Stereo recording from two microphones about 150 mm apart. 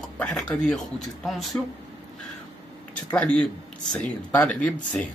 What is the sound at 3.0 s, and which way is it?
A man's voice, 10° left (ahead or behind).